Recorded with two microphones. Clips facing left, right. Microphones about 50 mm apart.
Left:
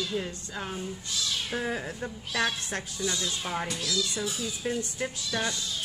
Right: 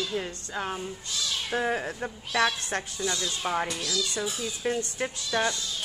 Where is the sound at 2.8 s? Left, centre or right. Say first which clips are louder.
Right 1 dB; right.